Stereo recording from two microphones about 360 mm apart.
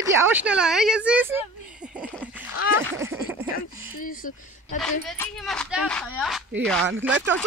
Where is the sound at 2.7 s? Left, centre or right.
Centre.